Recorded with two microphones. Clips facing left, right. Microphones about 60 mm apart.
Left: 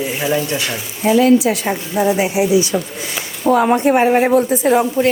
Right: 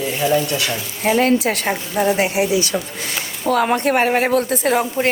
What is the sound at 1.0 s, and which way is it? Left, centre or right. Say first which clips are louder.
Speech: left 4 dB; right.